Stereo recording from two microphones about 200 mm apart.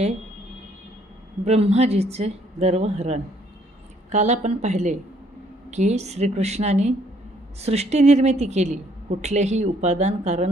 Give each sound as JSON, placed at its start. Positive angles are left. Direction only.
{"t": 1.4, "sound": "speech", "side_deg": -30}